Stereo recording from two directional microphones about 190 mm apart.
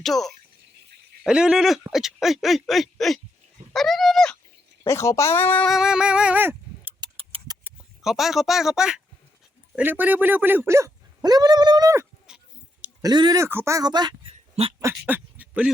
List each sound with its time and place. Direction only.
0.0 s speech: centre (ahead or behind)
4.8 s speech: 15° left (ahead or behind); by 6.9 s 10° right (ahead or behind)
7.0 s a sound: 25° right (ahead or behind)
8.0 s speech: centre (ahead or behind); by 12.0 s 20° right (ahead or behind)
12.3 s a sound: 5° right (ahead or behind)
12.8 s speech: 20° right (ahead or behind)